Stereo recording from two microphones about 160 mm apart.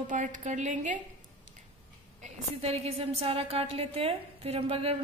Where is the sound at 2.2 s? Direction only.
40° right (ahead or behind).